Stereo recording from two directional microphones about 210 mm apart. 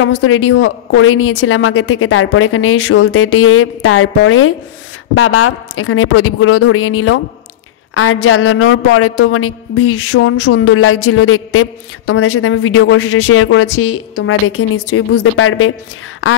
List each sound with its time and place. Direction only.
0.0 s a woman's voice: 80° left
5.1 s a woman's voice: 90° left